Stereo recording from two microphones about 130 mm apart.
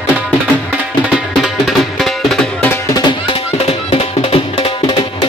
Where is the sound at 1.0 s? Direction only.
5° right (ahead or behind).